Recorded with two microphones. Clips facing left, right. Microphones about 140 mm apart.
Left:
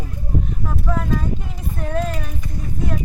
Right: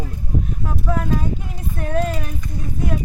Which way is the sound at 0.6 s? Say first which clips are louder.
Right 2 dB; 5° right (ahead or behind).